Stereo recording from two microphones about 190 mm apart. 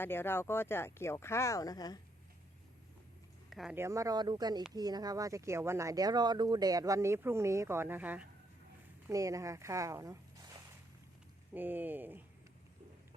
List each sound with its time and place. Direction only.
0.0 s speech: 10° left (ahead or behind)
3.5 s speech: centre (ahead or behind)
3.8 s speech: 15° right (ahead or behind)
11.5 s speech: 10° right (ahead or behind)